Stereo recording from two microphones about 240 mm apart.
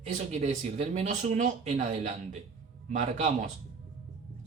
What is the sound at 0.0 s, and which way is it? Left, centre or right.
Speech, right.